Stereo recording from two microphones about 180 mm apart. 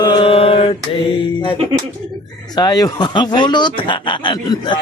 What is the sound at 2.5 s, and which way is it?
Speech, 25° left (ahead or behind).